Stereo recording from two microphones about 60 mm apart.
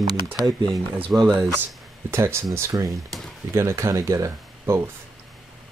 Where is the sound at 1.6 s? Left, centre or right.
Right.